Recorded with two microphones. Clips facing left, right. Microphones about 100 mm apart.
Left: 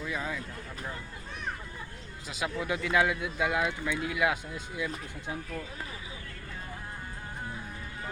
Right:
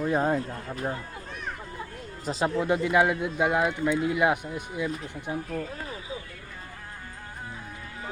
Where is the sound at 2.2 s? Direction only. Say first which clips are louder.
Right 7 dB; 30° right (ahead or behind).